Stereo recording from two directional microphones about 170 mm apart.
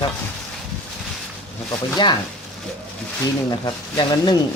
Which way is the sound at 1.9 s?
25° left (ahead or behind).